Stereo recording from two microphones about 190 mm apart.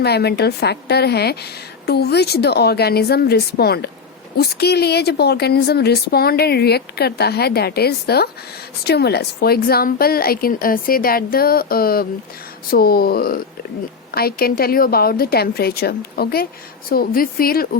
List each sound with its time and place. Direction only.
0.0 s a woman's voice: 60° left (ahead or behind)